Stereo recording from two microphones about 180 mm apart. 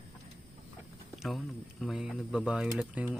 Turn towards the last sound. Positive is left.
turn(degrees=-5)  # may be behind; listen again after turning